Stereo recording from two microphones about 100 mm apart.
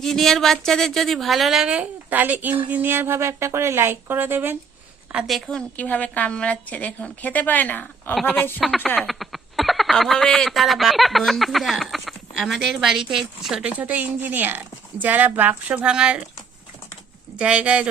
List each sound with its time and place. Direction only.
0.0 s a woman's voice: 5° left (ahead or behind); by 4.5 s 20° right (ahead or behind)
5.1 s a woman's voice: centre (ahead or behind); by 8.6 s 20° left (ahead or behind)
9.0 s speech: centre (ahead or behind)
13.7 s speech: 15° right (ahead or behind)
17.3 s speech: 10° right (ahead or behind)